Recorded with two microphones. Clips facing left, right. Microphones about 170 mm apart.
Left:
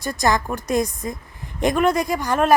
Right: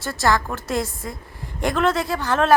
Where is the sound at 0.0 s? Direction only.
15° left (ahead or behind).